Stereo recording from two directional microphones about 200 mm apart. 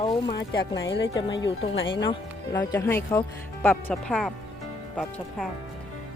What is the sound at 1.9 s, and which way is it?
Speech, 20° left (ahead or behind).